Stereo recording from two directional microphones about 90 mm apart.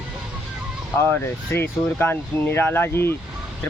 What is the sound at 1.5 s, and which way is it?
Speech, 25° left (ahead or behind).